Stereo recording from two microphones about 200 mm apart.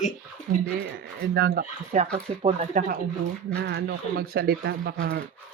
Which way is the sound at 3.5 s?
55° right (ahead or behind).